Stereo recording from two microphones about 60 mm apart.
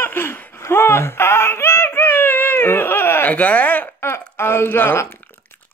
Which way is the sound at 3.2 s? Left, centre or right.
Left.